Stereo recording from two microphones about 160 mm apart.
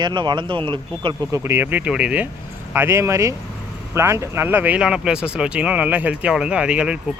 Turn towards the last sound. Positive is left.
turn(degrees=-5)  # may be behind; listen again after turning